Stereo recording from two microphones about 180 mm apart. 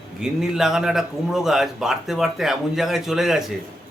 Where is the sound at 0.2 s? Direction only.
5° right (ahead or behind).